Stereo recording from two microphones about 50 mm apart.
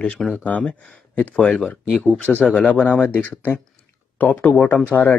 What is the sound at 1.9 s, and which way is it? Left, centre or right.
Speech, centre.